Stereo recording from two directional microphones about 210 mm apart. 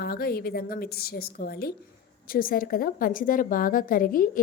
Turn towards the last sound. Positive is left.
turn(degrees=40)  # may be behind; listen again after turning